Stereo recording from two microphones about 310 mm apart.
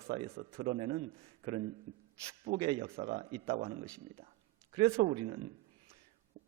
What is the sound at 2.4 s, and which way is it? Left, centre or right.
Speech, centre.